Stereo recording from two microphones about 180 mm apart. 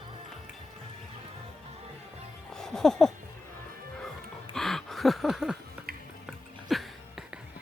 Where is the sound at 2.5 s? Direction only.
5° left (ahead or behind).